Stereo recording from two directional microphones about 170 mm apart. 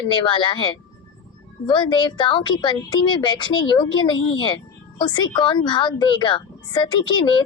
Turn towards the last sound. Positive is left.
turn(degrees=30)  # may be behind; listen again after turning